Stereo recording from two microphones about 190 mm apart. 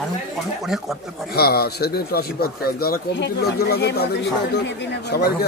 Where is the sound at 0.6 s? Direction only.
Centre (ahead or behind).